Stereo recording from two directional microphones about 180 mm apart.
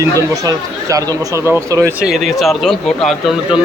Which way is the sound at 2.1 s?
Centre (ahead or behind).